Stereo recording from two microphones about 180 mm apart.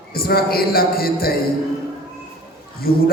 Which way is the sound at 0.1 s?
55° left (ahead or behind).